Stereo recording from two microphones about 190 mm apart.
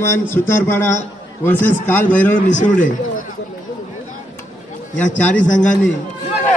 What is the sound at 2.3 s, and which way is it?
Speech, 40° left (ahead or behind).